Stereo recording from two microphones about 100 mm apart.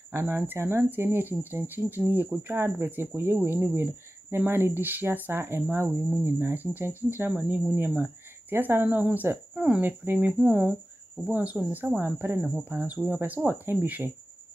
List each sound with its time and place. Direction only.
0.1 s speech: 25° right (ahead or behind)